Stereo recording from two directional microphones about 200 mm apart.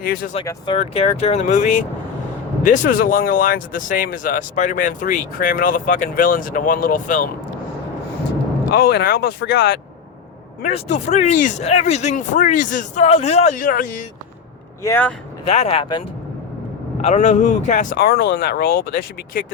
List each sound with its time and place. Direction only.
0.4 s speech: 25° left (ahead or behind); by 7.3 s 40° left (ahead or behind)
8.6 s speech: 50° left (ahead or behind)
10.6 s speech: 35° left (ahead or behind)
14.8 s speech: 10° left (ahead or behind)
15.4 s speech: 30° left (ahead or behind)
17.0 s speech: 35° left (ahead or behind)